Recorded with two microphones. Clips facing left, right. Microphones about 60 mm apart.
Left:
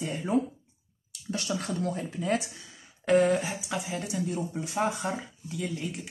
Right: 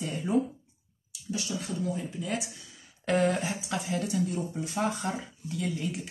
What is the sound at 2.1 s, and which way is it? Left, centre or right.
Speech, left.